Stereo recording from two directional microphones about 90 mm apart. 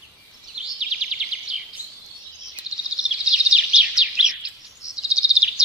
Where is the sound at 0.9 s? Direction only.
5° right (ahead or behind).